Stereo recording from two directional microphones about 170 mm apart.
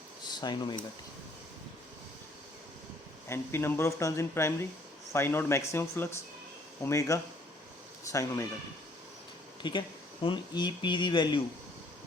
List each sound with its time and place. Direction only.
0.3 s speech: 25° left (ahead or behind)
3.2 s speech: 15° left (ahead or behind)
9.6 s speech: 30° left (ahead or behind)